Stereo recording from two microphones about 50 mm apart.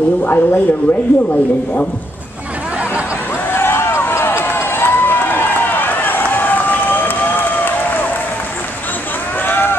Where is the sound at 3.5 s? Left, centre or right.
Left.